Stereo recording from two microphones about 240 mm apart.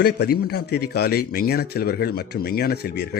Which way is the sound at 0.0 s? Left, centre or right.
Left.